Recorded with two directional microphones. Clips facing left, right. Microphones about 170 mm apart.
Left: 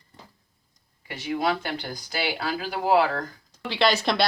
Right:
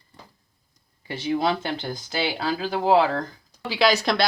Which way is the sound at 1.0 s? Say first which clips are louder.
Right 3 dB; 30° right (ahead or behind).